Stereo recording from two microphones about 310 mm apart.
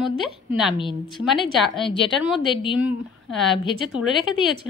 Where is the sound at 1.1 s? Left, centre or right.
Centre.